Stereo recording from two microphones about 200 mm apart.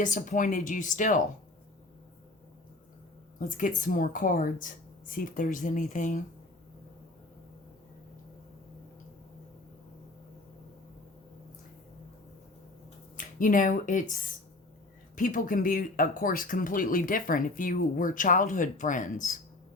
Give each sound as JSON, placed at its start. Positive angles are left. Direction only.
{"t": 0.0, "sound": "speech", "side_deg": 40}
{"t": 3.3, "sound": "speech", "side_deg": 40}
{"t": 13.1, "sound": "speech", "side_deg": 40}